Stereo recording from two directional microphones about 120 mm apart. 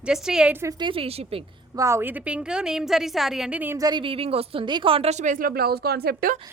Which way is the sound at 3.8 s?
40° right (ahead or behind).